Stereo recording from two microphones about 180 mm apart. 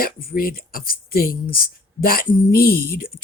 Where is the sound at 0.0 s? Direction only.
55° left (ahead or behind).